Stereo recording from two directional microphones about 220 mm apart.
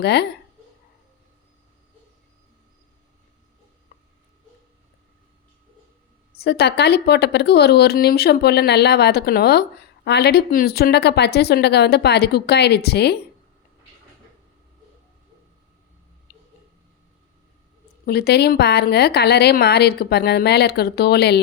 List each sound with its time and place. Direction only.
0.0 s speech: 50° left (ahead or behind)
6.3 s speech: 45° left (ahead or behind)
16.3 s a sound: 40° left (ahead or behind)
18.0 s speech: 45° left (ahead or behind)